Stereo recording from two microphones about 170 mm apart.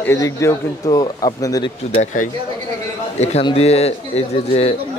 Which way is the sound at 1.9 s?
45° left (ahead or behind).